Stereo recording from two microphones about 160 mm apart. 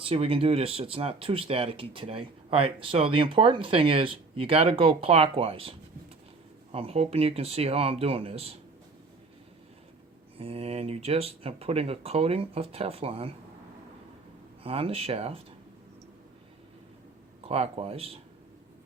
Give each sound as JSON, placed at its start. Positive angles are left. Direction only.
{"t": 0.0, "sound": "speech", "side_deg": -35}
{"t": 10.3, "sound": "speech", "side_deg": -40}
{"t": 14.6, "sound": "speech", "side_deg": -35}
{"t": 17.5, "sound": "speech", "side_deg": -35}